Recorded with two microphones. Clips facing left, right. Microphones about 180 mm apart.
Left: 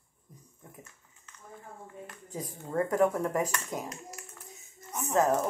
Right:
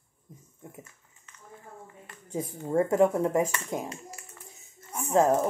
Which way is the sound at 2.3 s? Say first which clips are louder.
Right 7 dB; 25° right (ahead or behind).